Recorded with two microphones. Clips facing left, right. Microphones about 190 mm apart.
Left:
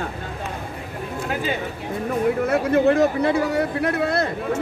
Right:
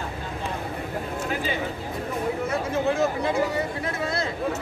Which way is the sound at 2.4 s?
65° left (ahead or behind).